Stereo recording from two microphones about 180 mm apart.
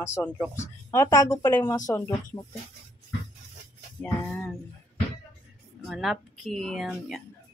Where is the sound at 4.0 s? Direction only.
5° left (ahead or behind).